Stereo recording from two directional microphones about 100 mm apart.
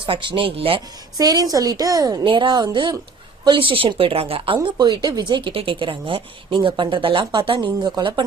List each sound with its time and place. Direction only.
0.0 s speech: 55° right (ahead or behind)
1.2 s a woman's voice: 40° right (ahead or behind)
2.2 s a woman's voice: 55° right (ahead or behind)